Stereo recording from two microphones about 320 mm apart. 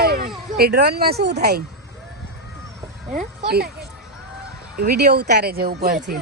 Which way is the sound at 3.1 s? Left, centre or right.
Right.